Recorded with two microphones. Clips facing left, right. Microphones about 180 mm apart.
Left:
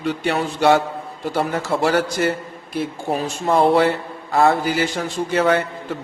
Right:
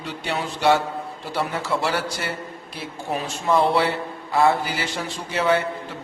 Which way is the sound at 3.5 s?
50° left (ahead or behind).